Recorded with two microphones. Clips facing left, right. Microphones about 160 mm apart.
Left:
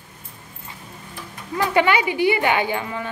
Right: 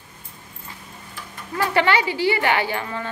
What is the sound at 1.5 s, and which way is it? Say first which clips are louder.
Speech: left 1 dB; 15° left (ahead or behind).